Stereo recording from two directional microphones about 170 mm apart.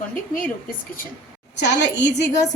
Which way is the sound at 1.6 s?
90° left.